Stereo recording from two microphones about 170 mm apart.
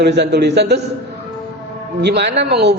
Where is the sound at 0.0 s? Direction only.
80° right.